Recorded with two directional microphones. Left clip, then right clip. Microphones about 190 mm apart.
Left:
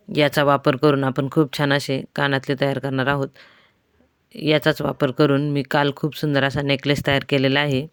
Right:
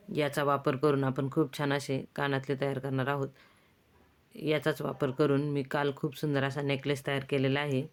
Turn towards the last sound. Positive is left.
turn(degrees=40)  # may be behind; listen again after turning